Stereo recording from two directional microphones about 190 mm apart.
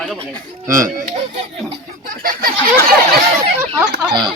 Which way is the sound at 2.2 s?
50° right (ahead or behind).